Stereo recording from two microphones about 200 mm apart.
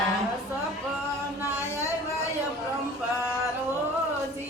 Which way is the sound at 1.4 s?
15° left (ahead or behind).